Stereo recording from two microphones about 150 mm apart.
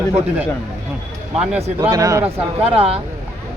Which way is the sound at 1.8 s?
20° right (ahead or behind).